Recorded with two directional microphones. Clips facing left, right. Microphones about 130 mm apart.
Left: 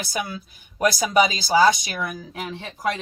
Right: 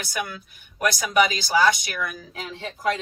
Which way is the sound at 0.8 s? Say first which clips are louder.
Left 2 dB; 30° left (ahead or behind).